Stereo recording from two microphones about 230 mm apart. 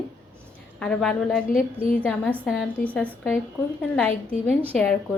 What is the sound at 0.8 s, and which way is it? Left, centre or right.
A woman's voice, centre.